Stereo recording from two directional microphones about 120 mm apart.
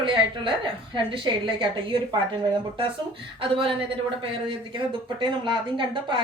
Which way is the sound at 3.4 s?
45° right (ahead or behind).